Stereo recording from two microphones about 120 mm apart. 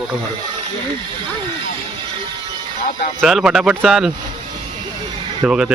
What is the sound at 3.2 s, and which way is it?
Speech, centre (ahead or behind).